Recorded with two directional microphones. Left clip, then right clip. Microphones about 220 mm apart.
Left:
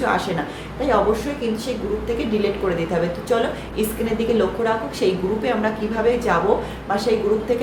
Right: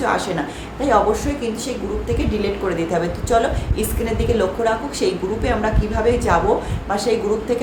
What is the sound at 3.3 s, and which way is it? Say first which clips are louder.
A woman's voice: right 5 dB; 15° right (ahead or behind).